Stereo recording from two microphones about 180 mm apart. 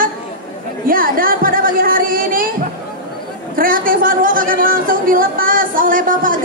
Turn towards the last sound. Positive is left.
turn(degrees=-50)  # may be behind; listen again after turning